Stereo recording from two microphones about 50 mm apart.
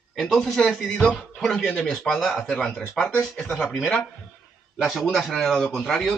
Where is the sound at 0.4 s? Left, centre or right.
Centre.